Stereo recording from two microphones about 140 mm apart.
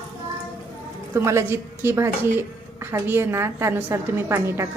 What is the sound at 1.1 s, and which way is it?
A woman's voice, 20° right (ahead or behind).